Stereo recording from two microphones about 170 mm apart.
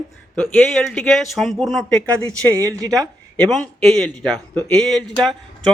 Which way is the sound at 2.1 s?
20° right (ahead or behind).